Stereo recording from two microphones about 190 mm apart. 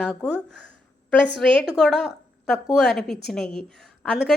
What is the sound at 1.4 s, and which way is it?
A woman's voice, 5° left (ahead or behind).